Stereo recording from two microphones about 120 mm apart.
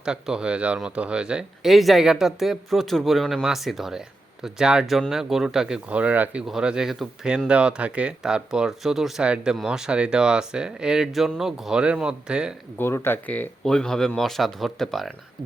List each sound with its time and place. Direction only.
0.0 s speech: 5° right (ahead or behind)
12.8 s speech: 20° left (ahead or behind); by 15.1 s centre (ahead or behind)